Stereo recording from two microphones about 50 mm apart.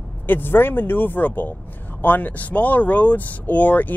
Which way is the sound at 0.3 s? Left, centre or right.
Left.